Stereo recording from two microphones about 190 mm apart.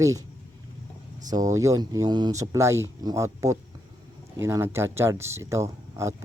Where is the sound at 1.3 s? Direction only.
15° right (ahead or behind).